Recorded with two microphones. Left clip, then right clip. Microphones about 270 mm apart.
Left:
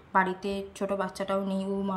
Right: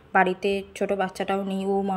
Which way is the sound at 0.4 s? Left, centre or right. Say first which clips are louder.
Right 7 dB; centre.